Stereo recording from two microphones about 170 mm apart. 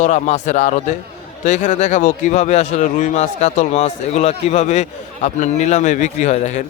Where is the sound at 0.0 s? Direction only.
45° left (ahead or behind).